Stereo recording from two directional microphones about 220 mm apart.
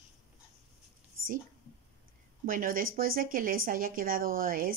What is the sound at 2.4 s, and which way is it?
Speech, 40° right (ahead or behind).